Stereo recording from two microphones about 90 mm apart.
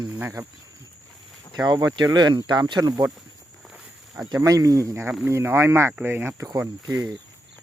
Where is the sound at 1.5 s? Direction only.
45° right (ahead or behind).